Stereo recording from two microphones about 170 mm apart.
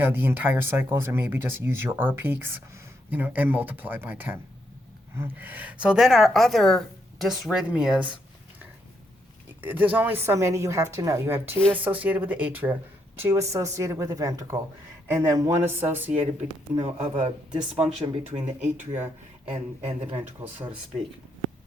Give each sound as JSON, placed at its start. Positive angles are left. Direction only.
{"t": 0.0, "sound": "a woman's voice", "side_deg": -10}
{"t": 9.6, "sound": "speech", "side_deg": -10}
{"t": 16.8, "sound": "speech", "side_deg": -40}
{"t": 18.9, "sound": "speech", "side_deg": -15}
{"t": 19.5, "sound": "speech", "side_deg": -35}